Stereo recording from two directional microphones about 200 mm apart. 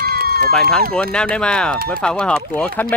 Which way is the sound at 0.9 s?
5° left (ahead or behind).